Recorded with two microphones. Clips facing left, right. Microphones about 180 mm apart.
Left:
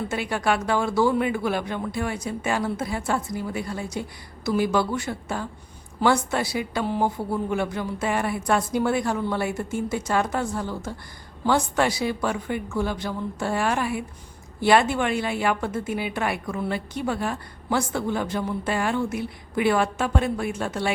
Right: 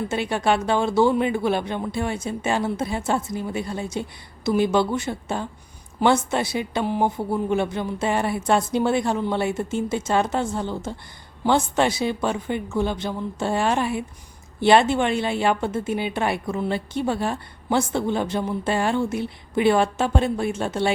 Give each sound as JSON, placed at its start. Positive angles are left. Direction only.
{"t": 0.1, "sound": "a woman's voice", "side_deg": -25}